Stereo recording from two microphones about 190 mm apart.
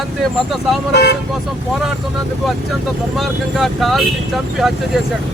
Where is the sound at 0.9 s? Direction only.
60° left (ahead or behind).